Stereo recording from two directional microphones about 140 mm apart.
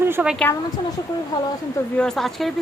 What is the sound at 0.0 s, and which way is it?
Speech, 10° right (ahead or behind).